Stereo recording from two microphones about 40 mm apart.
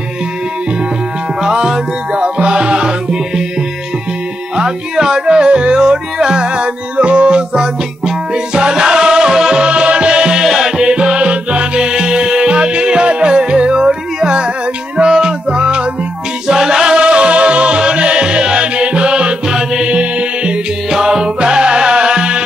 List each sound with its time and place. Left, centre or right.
2.1 s music: right
4.6 s music: centre
10.4 s music: centre
10.8 s music: right
16.4 s music: centre
19.9 s music: right
20.9 s music: centre